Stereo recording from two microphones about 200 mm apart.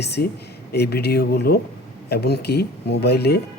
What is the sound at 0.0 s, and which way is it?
Speech, 55° left (ahead or behind).